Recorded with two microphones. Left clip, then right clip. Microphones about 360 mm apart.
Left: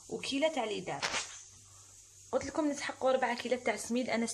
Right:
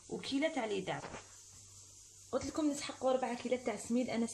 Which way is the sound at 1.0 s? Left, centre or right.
Left.